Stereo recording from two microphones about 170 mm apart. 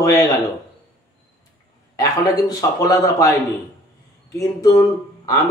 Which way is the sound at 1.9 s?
20° left (ahead or behind).